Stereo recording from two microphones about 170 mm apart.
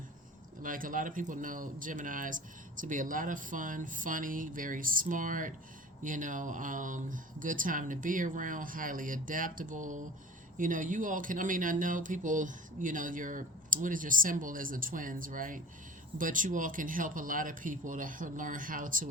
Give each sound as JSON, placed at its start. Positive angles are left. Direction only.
{"t": 0.6, "sound": "speech", "side_deg": -55}